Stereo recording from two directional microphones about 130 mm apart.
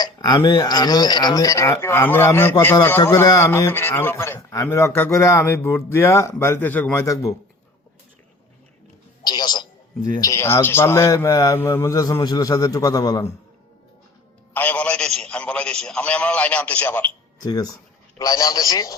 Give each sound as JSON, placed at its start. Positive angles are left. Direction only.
{"t": 0.0, "sound": "a man's voice", "side_deg": 30}
{"t": 9.2, "sound": "a sound", "side_deg": 35}
{"t": 10.2, "sound": "a man's voice", "side_deg": 25}
{"t": 14.5, "sound": "a man's voice", "side_deg": 15}
{"t": 17.4, "sound": "a man's voice", "side_deg": 30}